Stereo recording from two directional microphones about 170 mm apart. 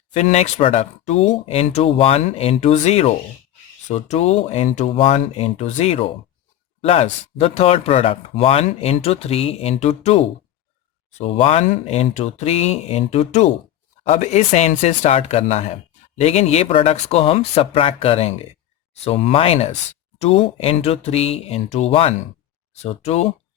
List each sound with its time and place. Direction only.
0.1 s speech: 40° left (ahead or behind)